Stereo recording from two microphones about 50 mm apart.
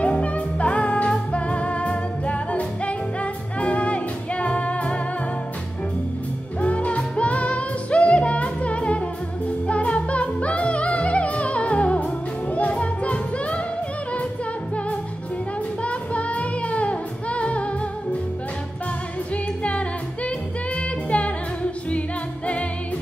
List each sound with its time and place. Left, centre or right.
0.0 s music: left
6.6 s music: left
15.8 s music: left
19.3 s music: left